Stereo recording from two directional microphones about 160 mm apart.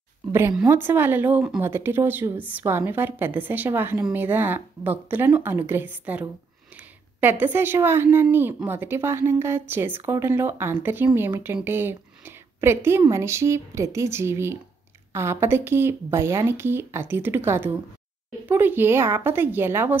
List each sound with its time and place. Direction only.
0.3 s a woman's voice: 15° right (ahead or behind)